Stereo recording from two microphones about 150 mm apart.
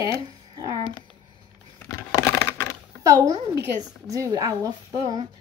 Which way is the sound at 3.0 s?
20° right (ahead or behind).